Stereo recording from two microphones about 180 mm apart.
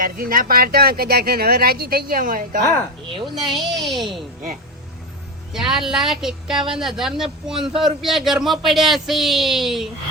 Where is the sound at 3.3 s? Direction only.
Centre (ahead or behind).